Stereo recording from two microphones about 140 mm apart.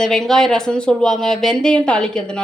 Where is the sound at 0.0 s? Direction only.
5° left (ahead or behind).